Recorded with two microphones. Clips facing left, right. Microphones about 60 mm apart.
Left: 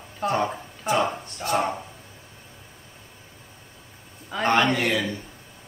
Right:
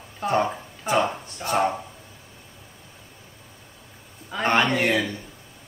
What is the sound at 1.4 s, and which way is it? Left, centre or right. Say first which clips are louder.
Speech: right 2 dB; right.